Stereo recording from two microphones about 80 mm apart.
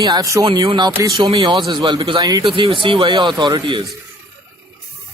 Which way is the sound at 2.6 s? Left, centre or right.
Right.